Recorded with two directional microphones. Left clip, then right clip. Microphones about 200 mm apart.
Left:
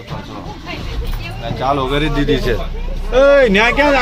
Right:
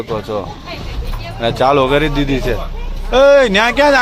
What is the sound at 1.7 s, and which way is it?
Speech, 25° right (ahead or behind).